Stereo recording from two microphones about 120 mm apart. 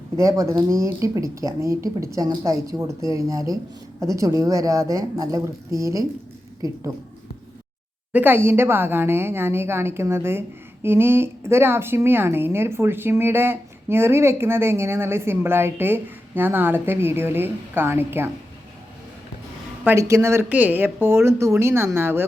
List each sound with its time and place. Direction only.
0.2 s a woman's voice: 25° right (ahead or behind)
8.1 s a woman's voice: 15° right (ahead or behind)
19.8 s a woman's voice: 20° right (ahead or behind)